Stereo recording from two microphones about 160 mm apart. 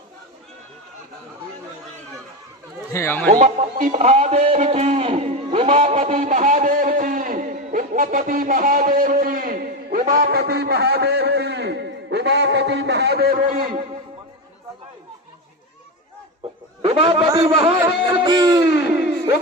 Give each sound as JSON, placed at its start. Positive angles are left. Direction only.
{"t": 2.9, "sound": "speech", "side_deg": 15}
{"t": 3.4, "sound": "a man's voice", "side_deg": -45}
{"t": 16.8, "sound": "a man's voice", "side_deg": -35}
{"t": 17.4, "sound": "a sound", "side_deg": -35}
{"t": 17.8, "sound": "music", "side_deg": -35}
{"t": 18.9, "sound": "a sound", "side_deg": -10}